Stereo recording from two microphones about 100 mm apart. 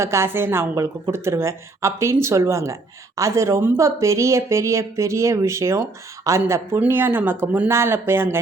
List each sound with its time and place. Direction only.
0.0 s speech: 25° right (ahead or behind)
6.5 s speech: 20° right (ahead or behind)